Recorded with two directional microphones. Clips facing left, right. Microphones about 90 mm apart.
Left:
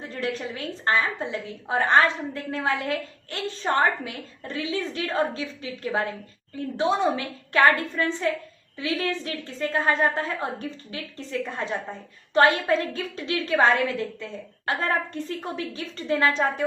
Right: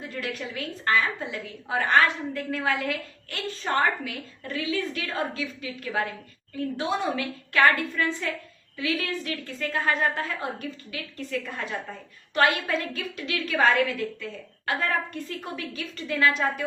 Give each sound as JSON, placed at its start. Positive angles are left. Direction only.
{"t": 0.1, "sound": "a woman's voice", "side_deg": 30}